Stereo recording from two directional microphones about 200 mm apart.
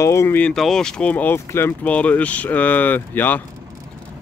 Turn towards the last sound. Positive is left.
turn(degrees=10)  # may be behind; listen again after turning